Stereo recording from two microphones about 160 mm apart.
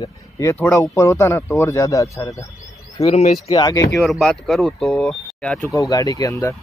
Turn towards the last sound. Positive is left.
turn(degrees=20)  # may be behind; listen again after turning